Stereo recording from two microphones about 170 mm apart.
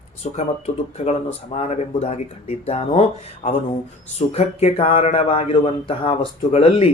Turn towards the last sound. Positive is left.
turn(degrees=35)  # may be behind; listen again after turning